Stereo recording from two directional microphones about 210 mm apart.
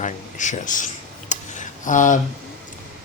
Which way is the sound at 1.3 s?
35° left (ahead or behind).